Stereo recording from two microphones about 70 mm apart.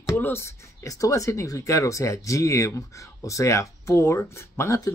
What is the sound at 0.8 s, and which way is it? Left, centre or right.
Speech, left.